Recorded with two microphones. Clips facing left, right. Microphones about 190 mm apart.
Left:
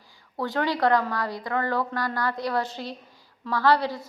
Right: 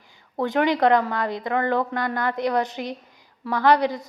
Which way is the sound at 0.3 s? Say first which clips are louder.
Right 5 dB; 20° right (ahead or behind).